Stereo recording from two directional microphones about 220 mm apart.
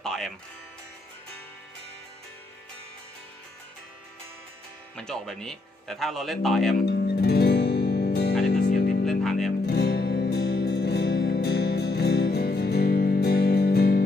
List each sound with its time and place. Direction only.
0.0 s music: centre (ahead or behind)
4.9 s a man's voice: 5° left (ahead or behind)
6.8 s music: 45° left (ahead or behind)
9.0 s music: centre (ahead or behind)
9.6 s music: 45° left (ahead or behind)